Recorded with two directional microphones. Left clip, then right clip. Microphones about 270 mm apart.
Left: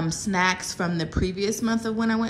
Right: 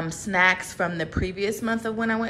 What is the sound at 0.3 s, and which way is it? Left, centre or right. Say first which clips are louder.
A woman's voice: right 4 dB; centre.